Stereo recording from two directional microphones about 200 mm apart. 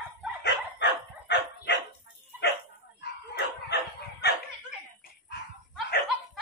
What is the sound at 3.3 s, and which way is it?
Dog, 55° left (ahead or behind).